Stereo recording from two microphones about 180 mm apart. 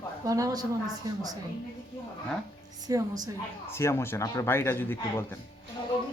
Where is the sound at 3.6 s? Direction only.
15° left (ahead or behind).